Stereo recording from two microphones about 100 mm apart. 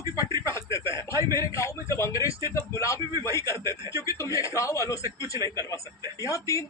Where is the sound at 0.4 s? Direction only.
30° left (ahead or behind).